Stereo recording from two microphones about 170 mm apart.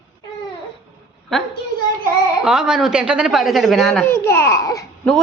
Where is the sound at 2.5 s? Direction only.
5° right (ahead or behind).